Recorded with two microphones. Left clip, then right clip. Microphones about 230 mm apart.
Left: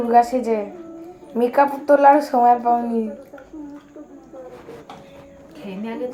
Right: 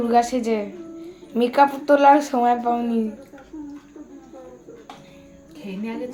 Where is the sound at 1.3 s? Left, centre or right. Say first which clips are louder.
Even; right.